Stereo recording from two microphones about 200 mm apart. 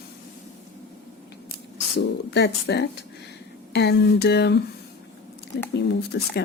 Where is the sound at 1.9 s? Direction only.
55° left (ahead or behind).